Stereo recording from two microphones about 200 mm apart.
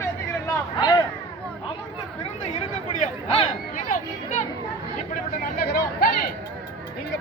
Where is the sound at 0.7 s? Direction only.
20° left (ahead or behind).